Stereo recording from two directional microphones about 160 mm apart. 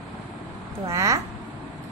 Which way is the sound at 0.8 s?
20° right (ahead or behind).